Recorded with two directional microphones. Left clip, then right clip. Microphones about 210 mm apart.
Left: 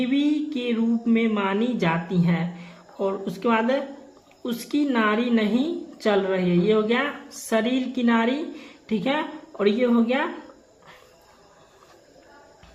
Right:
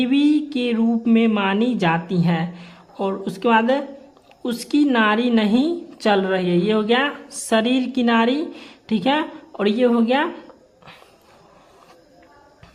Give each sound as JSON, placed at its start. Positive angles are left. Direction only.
{"t": 0.0, "sound": "a woman's voice", "side_deg": -45}